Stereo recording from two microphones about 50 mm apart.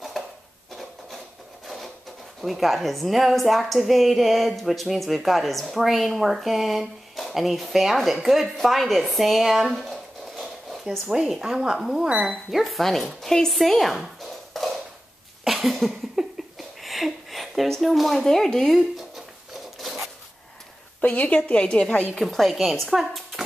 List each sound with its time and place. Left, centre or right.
0.2 s a sound: centre
2.4 s a woman's voice: centre
9.8 s a sound: centre
11.1 s a woman's voice: centre
14.2 s a sound: centre
17.6 s a woman's voice: centre
19.8 s zipper: centre
21.0 s a woman's voice: left
21.5 s a woman's voice: left
22.1 s a woman's voice: centre